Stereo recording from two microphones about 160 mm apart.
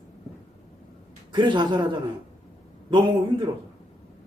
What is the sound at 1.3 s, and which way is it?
Speech, 30° right (ahead or behind).